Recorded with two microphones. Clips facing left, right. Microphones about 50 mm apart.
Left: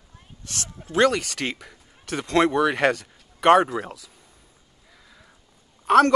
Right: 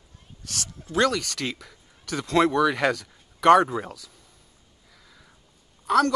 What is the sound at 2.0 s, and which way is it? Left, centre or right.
Speech, left.